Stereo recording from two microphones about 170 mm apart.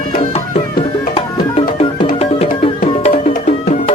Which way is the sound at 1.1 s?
35° left (ahead or behind).